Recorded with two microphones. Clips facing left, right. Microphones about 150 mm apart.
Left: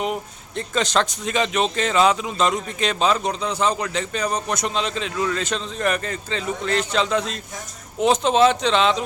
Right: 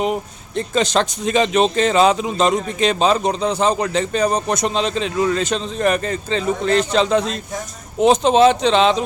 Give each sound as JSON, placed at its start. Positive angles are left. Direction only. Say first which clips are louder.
{"t": 0.0, "sound": "speech", "louder": "right 5 dB", "side_deg": -20}